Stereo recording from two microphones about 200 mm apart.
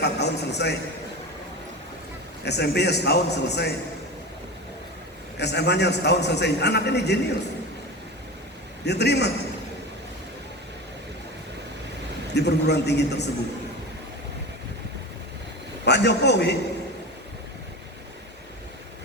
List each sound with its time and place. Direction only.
0.0 s a man's voice: 55° left (ahead or behind)
2.4 s a man's voice: 55° left (ahead or behind)
5.4 s a man's voice: 60° left (ahead or behind)
8.8 s a man's voice: 55° left (ahead or behind)
12.3 s a man's voice: 55° left (ahead or behind)
15.8 s a man's voice: 60° left (ahead or behind)